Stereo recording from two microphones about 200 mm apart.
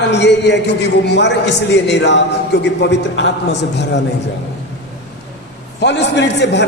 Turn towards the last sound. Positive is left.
turn(degrees=60)  # may be behind; listen again after turning